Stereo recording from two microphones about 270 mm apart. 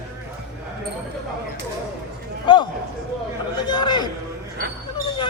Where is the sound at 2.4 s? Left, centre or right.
Centre.